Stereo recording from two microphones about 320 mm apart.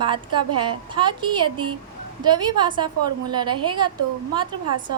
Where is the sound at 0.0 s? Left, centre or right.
Centre.